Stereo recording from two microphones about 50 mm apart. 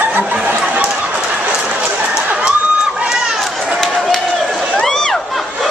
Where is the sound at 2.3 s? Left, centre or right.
Centre.